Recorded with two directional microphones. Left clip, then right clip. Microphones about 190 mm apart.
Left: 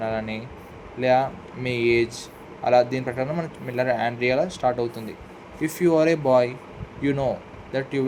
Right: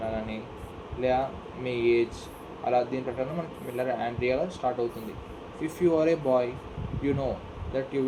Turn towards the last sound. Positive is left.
turn(degrees=60)  # may be behind; listen again after turning